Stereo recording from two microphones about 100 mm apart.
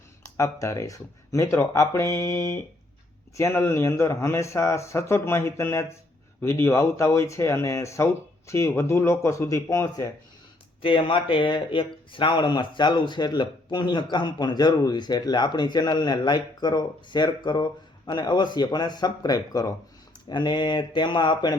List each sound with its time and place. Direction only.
0.2 s speech: 30° left (ahead or behind)
10.8 s speech: 60° left (ahead or behind)